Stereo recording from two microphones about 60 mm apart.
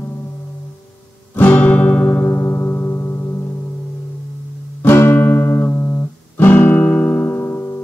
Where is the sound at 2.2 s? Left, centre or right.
Left.